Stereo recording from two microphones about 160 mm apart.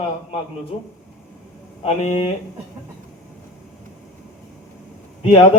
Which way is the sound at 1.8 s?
40° left (ahead or behind).